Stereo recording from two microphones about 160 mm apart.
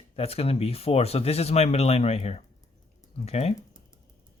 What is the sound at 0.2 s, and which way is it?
Speech, 40° left (ahead or behind).